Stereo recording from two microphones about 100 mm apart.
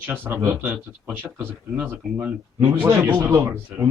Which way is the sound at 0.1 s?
20° right (ahead or behind).